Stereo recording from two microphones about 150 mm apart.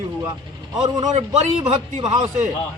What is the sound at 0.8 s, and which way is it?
Speech, 25° right (ahead or behind).